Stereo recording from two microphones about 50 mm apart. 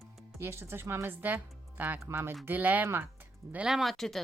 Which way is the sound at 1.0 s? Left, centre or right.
Right.